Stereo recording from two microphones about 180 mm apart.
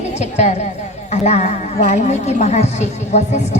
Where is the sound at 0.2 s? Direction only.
40° left (ahead or behind).